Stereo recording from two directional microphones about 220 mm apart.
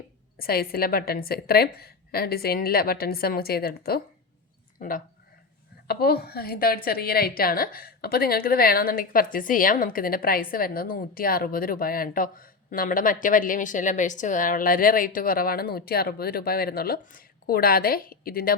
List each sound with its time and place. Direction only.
0.3 s a woman's voice: 45° left (ahead or behind)